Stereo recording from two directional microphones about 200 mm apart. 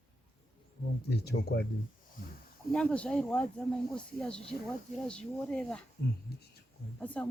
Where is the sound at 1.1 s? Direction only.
55° left (ahead or behind).